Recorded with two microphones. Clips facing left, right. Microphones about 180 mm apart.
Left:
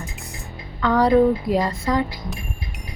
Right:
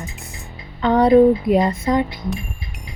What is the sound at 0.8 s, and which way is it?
Speech, 25° right (ahead or behind).